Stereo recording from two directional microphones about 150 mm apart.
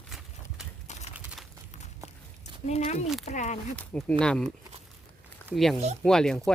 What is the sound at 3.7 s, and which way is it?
Speech, 10° left (ahead or behind).